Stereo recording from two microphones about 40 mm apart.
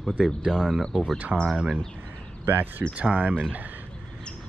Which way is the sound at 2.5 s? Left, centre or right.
Right.